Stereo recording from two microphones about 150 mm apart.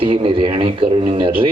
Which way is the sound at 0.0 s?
35° right (ahead or behind).